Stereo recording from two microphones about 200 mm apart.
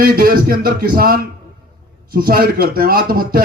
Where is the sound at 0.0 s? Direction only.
45° right (ahead or behind).